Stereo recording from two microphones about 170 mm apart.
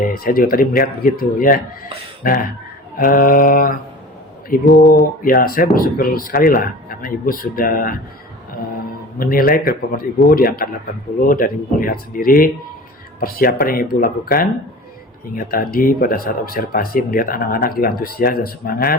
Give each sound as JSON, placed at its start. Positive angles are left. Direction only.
{"t": 0.1, "sound": "speech", "side_deg": 60}
{"t": 5.2, "sound": "speech", "side_deg": 60}
{"t": 9.1, "sound": "speech", "side_deg": 55}